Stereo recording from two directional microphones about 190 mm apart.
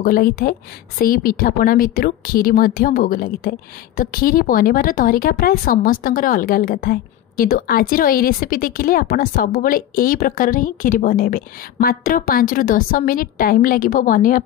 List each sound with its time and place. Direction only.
0.0 s a woman's voice: 50° left (ahead or behind)